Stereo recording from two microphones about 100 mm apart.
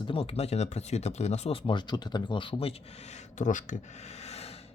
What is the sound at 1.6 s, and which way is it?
Speech, 50° left (ahead or behind).